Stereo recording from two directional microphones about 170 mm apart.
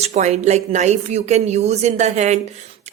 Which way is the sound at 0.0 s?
40° right (ahead or behind).